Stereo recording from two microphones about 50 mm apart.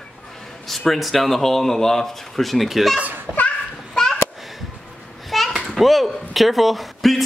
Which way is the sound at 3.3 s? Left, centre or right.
Centre.